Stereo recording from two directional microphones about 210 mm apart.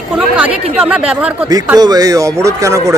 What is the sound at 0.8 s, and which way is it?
A man's voice, 5° right (ahead or behind).